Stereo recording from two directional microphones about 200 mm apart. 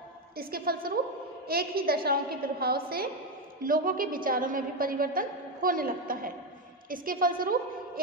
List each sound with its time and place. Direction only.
0.4 s a woman's voice: 50° right (ahead or behind)